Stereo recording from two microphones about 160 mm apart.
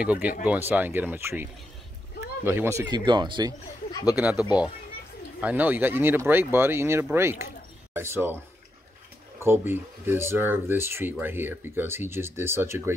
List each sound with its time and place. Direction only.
0.0 s speech: 10° right (ahead or behind)
3.1 s speech: 30° right (ahead or behind)
4.1 s speech: 10° right (ahead or behind)
9.4 s speech: 15° right (ahead or behind)